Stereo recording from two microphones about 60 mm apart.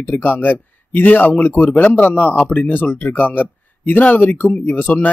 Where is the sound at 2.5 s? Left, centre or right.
Left.